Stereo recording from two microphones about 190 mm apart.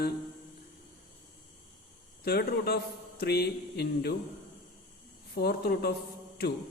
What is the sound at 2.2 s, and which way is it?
Speech, 60° left (ahead or behind).